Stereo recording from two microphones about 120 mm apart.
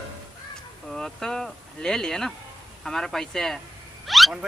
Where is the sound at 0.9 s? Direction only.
5° left (ahead or behind).